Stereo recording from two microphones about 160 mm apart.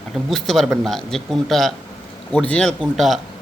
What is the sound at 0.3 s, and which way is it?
Speech, centre (ahead or behind).